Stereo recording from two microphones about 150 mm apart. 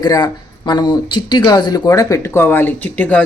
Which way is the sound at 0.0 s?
30° left (ahead or behind).